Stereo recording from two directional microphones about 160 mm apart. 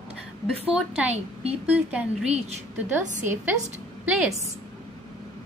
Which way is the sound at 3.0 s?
50° right (ahead or behind).